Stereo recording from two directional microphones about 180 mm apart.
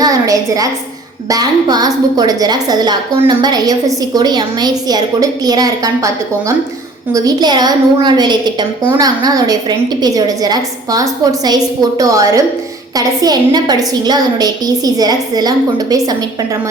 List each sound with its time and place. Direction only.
0.0 s a sound: 20° right (ahead or behind)
1.3 s a woman's voice: 20° right (ahead or behind)
7.1 s a woman's voice: 20° right (ahead or behind)